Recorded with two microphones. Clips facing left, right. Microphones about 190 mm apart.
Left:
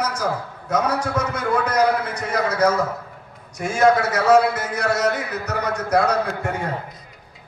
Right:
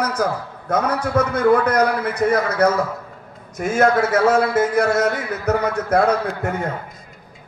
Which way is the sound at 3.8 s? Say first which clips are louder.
Right 1 dB; 50° right (ahead or behind).